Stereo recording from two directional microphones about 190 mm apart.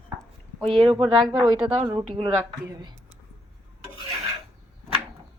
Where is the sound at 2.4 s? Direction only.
20° right (ahead or behind).